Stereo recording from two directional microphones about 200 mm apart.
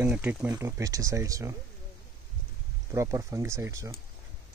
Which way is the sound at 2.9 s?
15° right (ahead or behind).